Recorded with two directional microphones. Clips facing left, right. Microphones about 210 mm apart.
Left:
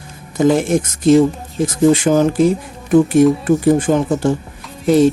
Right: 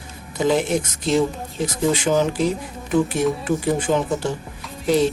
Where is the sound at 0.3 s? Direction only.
50° left (ahead or behind).